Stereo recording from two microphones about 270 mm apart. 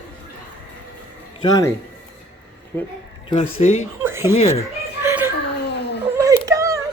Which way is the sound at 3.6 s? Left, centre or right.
Left.